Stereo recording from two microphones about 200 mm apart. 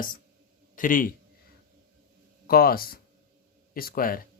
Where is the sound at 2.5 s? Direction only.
45° left (ahead or behind).